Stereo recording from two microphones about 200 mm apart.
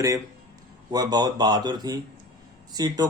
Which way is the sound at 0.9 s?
20° right (ahead or behind).